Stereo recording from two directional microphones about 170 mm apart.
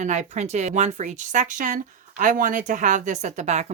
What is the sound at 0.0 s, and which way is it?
Speech, 45° right (ahead or behind).